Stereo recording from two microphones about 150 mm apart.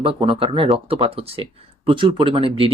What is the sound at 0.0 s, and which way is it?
Speech, 35° right (ahead or behind).